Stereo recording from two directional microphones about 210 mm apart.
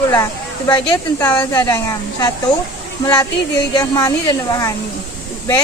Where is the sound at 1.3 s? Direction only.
20° left (ahead or behind).